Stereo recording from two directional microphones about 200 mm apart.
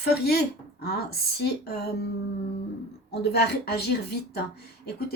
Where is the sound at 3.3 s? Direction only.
55° left (ahead or behind).